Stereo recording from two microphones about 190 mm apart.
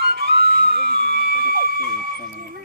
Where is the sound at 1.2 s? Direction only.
50° right (ahead or behind).